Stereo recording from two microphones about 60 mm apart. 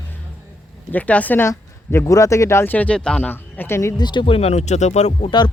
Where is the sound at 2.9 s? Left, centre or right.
Centre.